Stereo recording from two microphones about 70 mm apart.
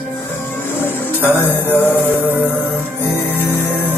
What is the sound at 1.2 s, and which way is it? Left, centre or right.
Mantra, left.